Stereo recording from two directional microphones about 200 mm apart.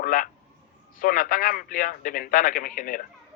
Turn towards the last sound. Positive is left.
turn(degrees=45)  # may be behind; listen again after turning